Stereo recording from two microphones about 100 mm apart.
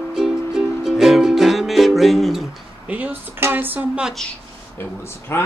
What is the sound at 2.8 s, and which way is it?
Speech, 15° right (ahead or behind).